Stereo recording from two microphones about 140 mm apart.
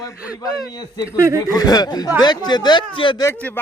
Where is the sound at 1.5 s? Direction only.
25° left (ahead or behind).